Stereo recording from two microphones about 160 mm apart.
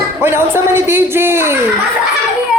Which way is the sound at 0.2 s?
15° right (ahead or behind).